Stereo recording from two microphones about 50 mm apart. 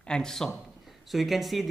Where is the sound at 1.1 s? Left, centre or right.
Centre.